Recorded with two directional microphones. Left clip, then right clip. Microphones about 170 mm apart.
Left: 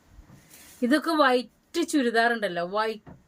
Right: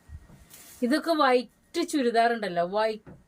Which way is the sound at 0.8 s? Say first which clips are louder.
Left 1 dB; 25° left (ahead or behind).